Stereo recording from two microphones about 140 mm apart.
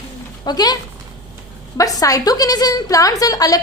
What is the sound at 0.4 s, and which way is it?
Speech, 30° left (ahead or behind).